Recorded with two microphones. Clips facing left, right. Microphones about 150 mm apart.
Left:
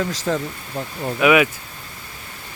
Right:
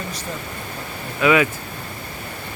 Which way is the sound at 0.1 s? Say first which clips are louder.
Left 8 dB; 90° left.